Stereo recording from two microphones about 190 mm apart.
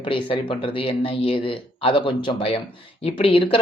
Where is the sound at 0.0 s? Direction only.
25° left (ahead or behind).